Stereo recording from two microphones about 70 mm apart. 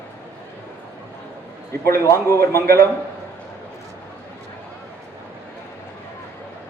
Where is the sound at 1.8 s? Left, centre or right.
Left.